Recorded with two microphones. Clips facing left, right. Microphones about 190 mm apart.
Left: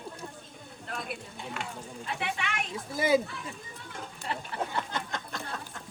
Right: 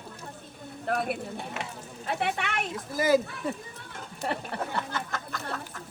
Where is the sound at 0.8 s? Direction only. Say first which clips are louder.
Right 9 dB; 60° right (ahead or behind).